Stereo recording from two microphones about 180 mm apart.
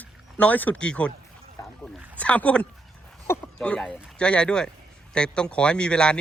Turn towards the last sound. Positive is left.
turn(degrees=5)  # may be behind; listen again after turning